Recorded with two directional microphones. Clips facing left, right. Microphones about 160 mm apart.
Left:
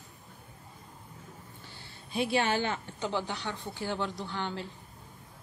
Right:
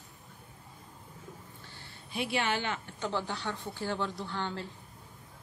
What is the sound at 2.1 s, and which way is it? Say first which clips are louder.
Speech: left 4 dB; 35° left (ahead or behind).